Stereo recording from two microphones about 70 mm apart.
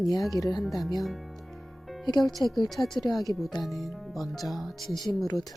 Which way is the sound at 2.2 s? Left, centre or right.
Centre.